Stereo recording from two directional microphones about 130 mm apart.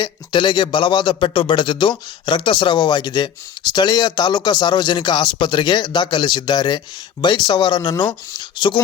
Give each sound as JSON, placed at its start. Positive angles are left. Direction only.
{"t": 0.0, "sound": "a man's voice", "side_deg": 35}